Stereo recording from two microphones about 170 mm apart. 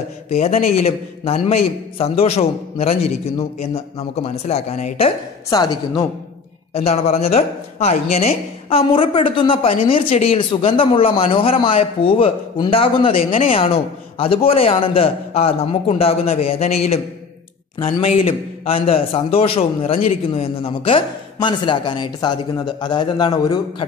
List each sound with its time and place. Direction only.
0.3 s a woman's voice: 40° left (ahead or behind)
5.5 s a man's voice: 25° left (ahead or behind)
6.7 s a woman's voice: 35° left (ahead or behind)